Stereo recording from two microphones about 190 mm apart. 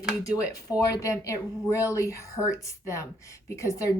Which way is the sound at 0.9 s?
15° left (ahead or behind).